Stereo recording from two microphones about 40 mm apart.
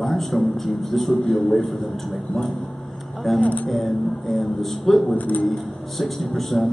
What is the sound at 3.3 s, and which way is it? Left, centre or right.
Speech, left.